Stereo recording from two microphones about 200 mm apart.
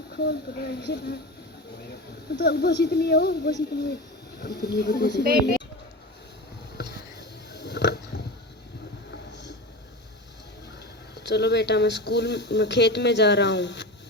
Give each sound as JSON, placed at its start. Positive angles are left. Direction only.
{"t": 0.1, "sound": "speech", "side_deg": 55}
{"t": 2.3, "sound": "speech", "side_deg": 55}
{"t": 6.7, "sound": "a sound", "side_deg": 60}
{"t": 9.3, "sound": "vehicle", "side_deg": 60}
{"t": 11.1, "sound": "speech", "side_deg": 55}